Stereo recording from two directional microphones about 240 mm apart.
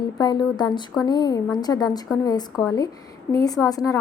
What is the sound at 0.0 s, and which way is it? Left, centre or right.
A woman's voice, centre.